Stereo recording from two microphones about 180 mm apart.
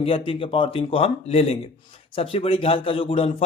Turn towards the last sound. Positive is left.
turn(degrees=30)  # may be behind; listen again after turning